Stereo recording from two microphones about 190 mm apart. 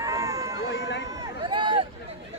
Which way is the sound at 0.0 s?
15° right (ahead or behind).